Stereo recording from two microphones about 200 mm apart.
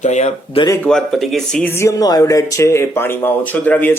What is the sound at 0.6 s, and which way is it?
Speech, 15° left (ahead or behind).